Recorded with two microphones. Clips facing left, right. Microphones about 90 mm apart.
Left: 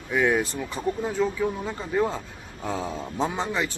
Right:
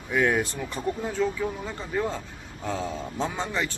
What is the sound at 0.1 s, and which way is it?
Speech, centre (ahead or behind).